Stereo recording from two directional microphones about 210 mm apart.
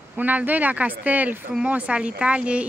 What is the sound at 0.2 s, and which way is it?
Speech, 10° right (ahead or behind).